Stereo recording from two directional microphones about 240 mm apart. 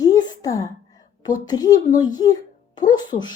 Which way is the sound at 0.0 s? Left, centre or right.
Centre.